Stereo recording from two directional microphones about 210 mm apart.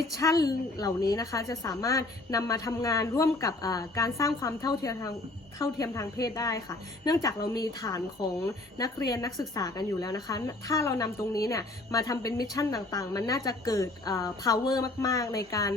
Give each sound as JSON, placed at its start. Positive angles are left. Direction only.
{"t": 0.1, "sound": "a woman's voice", "side_deg": 15}